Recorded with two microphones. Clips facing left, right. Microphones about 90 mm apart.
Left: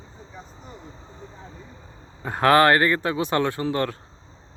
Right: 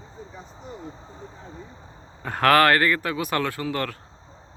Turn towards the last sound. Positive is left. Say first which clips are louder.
# left 3 dB
turn(degrees=25)  # may be behind; listen again after turning